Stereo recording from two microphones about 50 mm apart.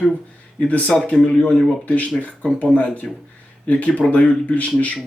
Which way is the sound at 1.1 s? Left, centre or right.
Centre.